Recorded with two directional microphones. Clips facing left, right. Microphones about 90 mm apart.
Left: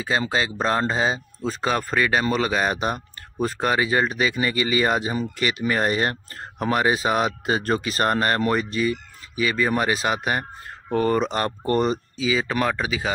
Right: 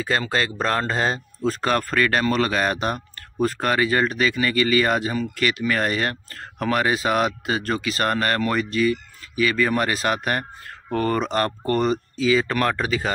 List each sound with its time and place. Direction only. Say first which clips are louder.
0.0 s speech: even; 15° left (ahead or behind)
12.2 s speech: right 3 dB; 10° left (ahead or behind)